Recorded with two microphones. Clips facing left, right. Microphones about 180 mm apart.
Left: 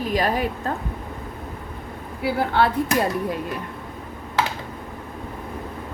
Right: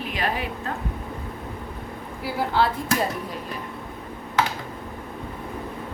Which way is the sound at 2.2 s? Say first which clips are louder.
Left 3 dB; 60° left (ahead or behind).